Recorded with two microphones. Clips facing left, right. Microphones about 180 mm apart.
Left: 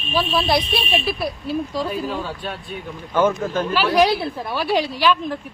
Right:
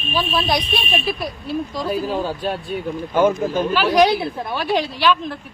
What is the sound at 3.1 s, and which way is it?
Speech, 15° right (ahead or behind).